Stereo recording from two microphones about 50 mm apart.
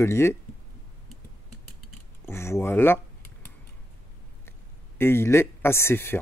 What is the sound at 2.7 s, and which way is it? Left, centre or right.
Speech, left.